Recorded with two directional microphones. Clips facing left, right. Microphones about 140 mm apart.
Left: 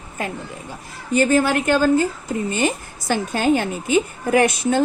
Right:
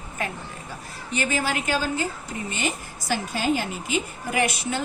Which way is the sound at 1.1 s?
45° left (ahead or behind).